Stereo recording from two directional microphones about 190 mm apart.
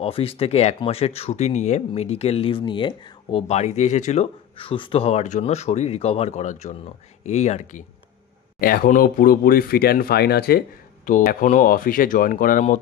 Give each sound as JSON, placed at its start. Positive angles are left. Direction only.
{"t": 0.0, "sound": "speech", "side_deg": 30}
{"t": 8.5, "sound": "speech", "side_deg": 50}
{"t": 11.1, "sound": "speech", "side_deg": 45}